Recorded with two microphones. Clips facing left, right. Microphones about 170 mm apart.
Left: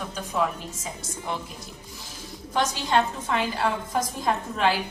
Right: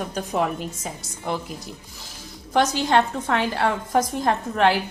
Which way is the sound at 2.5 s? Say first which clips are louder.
Right 4 dB; 65° right (ahead or behind).